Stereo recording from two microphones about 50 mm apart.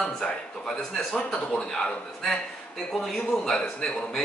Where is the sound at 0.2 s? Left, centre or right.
Centre.